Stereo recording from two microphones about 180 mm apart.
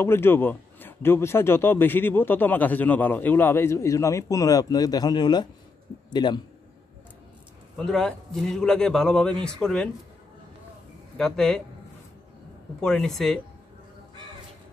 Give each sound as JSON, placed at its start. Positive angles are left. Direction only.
{"t": 0.0, "sound": "a man's voice", "side_deg": 10}
{"t": 7.7, "sound": "a man's voice", "side_deg": 5}
{"t": 11.1, "sound": "a man's voice", "side_deg": 5}
{"t": 12.8, "sound": "a man's voice", "side_deg": 5}